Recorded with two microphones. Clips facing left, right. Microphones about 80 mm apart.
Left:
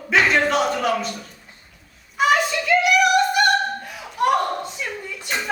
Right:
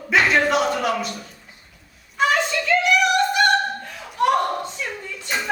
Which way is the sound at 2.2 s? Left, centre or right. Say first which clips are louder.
Left 1 dB; centre.